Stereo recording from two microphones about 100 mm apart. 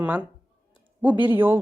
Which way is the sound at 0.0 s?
15° right (ahead or behind).